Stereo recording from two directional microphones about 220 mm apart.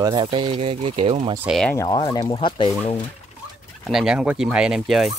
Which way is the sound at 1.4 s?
Centre (ahead or behind).